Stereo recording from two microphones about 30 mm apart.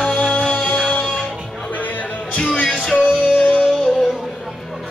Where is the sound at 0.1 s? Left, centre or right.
Left.